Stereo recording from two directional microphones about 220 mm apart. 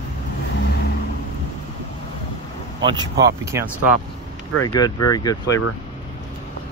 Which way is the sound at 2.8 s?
20° right (ahead or behind).